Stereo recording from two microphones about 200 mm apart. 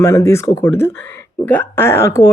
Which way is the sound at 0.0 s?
15° left (ahead or behind).